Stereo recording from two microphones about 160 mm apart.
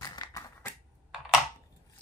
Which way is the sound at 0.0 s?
25° left (ahead or behind).